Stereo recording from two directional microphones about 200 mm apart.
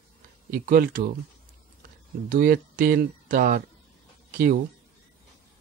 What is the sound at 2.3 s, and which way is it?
Speech, 45° right (ahead or behind).